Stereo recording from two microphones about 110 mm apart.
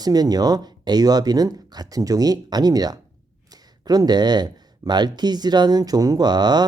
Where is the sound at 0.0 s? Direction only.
35° right (ahead or behind).